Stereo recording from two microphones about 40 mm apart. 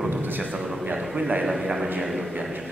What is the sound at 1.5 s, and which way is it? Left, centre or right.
Speech, centre.